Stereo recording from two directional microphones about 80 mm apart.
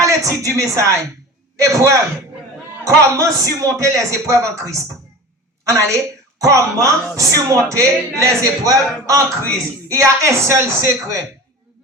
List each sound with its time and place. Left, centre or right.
0.0 s a man's voice: right